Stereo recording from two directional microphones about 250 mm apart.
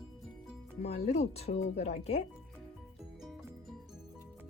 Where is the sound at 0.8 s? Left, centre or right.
Left.